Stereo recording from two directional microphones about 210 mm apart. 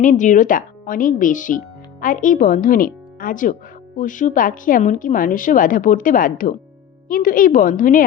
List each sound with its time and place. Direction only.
0.0 s a woman's voice: 35° left (ahead or behind)